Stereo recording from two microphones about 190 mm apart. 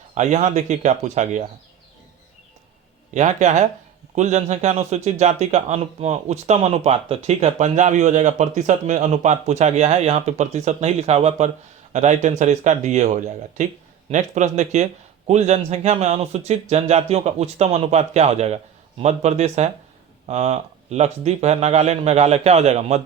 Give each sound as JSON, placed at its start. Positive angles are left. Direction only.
{"t": 0.1, "sound": "a man's voice", "side_deg": -40}
{"t": 3.1, "sound": "a man's voice", "side_deg": -40}